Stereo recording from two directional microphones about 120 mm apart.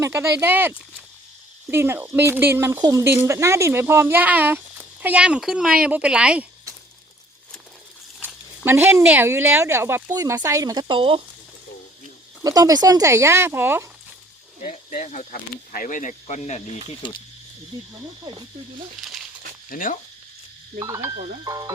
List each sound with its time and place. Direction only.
0.0 s speech: 25° right (ahead or behind)
1.7 s speech: 20° right (ahead or behind)
8.6 s speech: 20° right (ahead or behind)
10.8 s speech: 45° right (ahead or behind)
12.4 s speech: 30° right (ahead or behind)
14.7 s speech: 80° left
15.8 s speech: 90° left; by 16.6 s 70° left (ahead or behind)
17.7 s speech: 40° right (ahead or behind)
19.0 s crumpling: centre (ahead or behind)
20.7 s speech: 25° right (ahead or behind)